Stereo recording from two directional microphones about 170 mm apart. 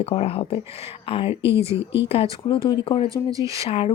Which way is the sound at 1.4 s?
15° right (ahead or behind).